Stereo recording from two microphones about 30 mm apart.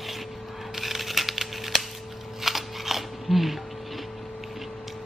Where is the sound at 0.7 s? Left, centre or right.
Centre.